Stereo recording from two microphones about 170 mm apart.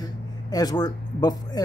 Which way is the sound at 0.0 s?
25° left (ahead or behind).